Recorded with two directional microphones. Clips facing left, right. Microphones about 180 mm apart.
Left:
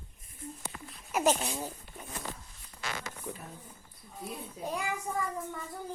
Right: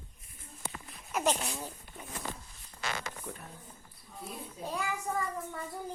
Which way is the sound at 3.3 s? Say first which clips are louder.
Left 3 dB; centre (ahead or behind).